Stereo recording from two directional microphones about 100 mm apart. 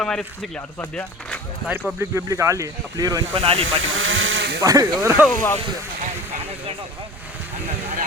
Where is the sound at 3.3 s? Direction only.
75° right (ahead or behind).